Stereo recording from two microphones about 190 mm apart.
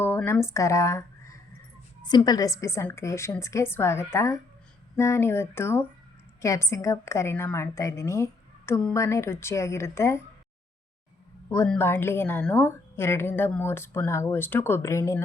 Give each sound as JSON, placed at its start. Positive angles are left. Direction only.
{"t": 0.0, "sound": "a woman's voice", "side_deg": 10}
{"t": 11.4, "sound": "a woman's voice", "side_deg": 15}